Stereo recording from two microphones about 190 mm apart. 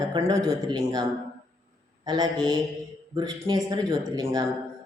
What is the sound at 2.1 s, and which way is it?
A man's voice, 20° right (ahead or behind).